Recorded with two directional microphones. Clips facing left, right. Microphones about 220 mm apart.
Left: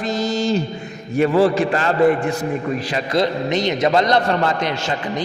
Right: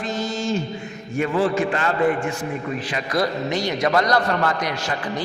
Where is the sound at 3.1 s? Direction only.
20° left (ahead or behind).